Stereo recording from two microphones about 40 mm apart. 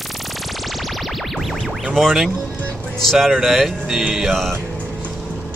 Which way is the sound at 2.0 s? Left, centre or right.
Centre.